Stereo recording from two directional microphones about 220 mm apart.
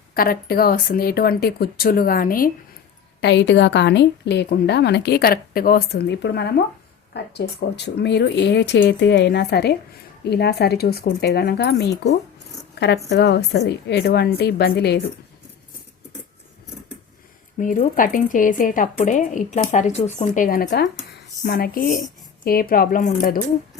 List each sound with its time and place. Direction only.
0.1 s a woman's voice: 40° left (ahead or behind)
3.2 s a woman's voice: 50° left (ahead or behind)
17.6 s speech: 35° left (ahead or behind)